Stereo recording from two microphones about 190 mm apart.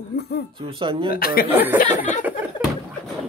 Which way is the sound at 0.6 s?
25° right (ahead or behind).